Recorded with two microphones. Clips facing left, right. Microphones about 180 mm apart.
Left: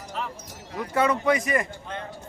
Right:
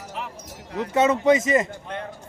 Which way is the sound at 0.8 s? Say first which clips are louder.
Right 4 dB; 25° right (ahead or behind).